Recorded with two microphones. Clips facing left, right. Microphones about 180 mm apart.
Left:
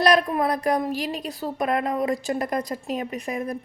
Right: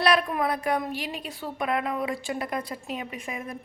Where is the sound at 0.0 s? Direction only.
35° left (ahead or behind).